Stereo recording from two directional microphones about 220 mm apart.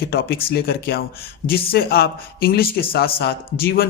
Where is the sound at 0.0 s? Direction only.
45° left (ahead or behind).